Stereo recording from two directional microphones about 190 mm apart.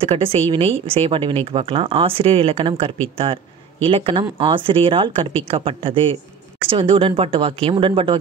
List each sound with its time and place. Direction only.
0.0 s speech: 30° right (ahead or behind)